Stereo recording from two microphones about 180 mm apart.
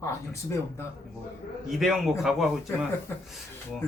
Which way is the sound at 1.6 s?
Centre (ahead or behind).